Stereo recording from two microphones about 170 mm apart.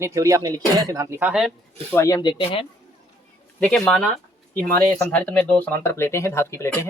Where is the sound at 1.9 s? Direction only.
20° left (ahead or behind).